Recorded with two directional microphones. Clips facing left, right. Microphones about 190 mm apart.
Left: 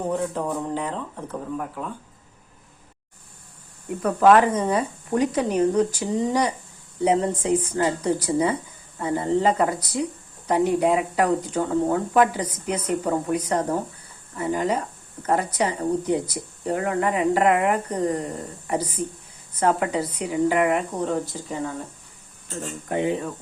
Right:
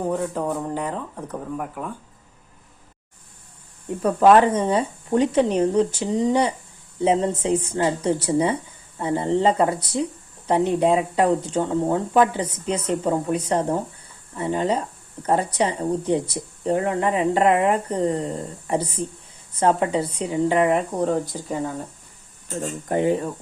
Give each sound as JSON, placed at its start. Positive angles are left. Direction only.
{"t": 0.1, "sound": "speech", "side_deg": -5}
{"t": 4.0, "sound": "speech", "side_deg": -25}
{"t": 22.4, "sound": "speech", "side_deg": -45}